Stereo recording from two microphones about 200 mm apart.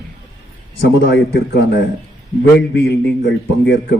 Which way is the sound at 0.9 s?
60° left (ahead or behind).